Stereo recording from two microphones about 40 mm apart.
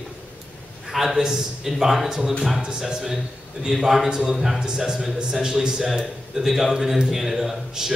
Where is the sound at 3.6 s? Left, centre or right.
Centre.